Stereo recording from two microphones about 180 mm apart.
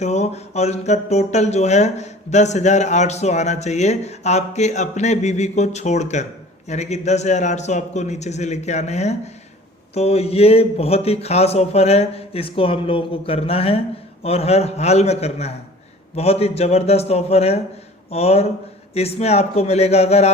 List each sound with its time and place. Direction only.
0.0 s speech: 40° left (ahead or behind)